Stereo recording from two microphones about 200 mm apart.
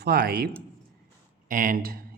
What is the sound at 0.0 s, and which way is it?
Speech, 50° right (ahead or behind).